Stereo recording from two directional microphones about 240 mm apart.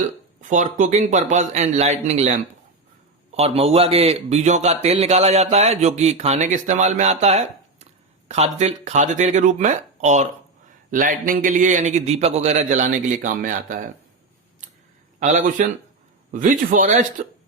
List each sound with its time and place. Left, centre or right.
0.5 s a man's voice: right
3.3 s a man's voice: right
15.2 s a man's voice: right